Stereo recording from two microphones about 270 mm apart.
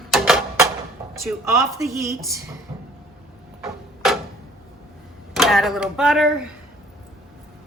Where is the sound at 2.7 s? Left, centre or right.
Centre.